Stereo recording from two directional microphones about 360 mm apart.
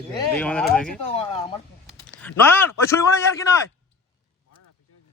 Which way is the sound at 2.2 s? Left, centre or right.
Centre.